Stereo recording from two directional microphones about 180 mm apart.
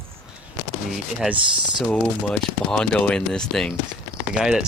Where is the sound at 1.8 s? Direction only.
5° left (ahead or behind).